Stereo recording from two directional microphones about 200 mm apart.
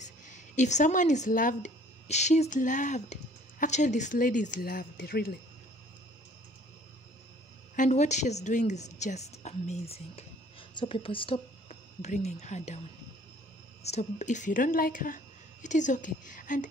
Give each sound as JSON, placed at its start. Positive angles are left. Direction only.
{"t": 0.0, "sound": "speech", "side_deg": 35}
{"t": 7.7, "sound": "a woman's voice", "side_deg": 40}
{"t": 13.8, "sound": "speech", "side_deg": 35}